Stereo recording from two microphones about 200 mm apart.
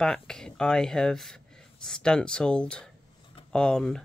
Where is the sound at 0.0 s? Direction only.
5° left (ahead or behind).